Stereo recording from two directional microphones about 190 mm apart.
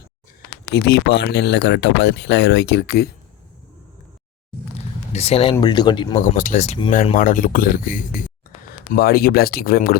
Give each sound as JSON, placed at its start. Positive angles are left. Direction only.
{"t": 0.7, "sound": "speech", "side_deg": 60}
{"t": 5.1, "sound": "speech", "side_deg": 30}
{"t": 6.1, "sound": "speech", "side_deg": 45}